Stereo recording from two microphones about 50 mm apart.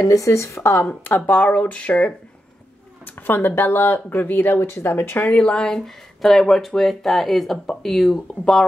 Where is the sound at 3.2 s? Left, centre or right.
Left.